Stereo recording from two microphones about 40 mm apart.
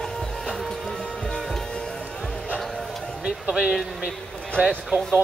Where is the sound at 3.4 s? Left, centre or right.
Centre.